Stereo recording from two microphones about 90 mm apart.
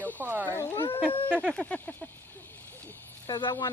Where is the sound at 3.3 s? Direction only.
55° left (ahead or behind).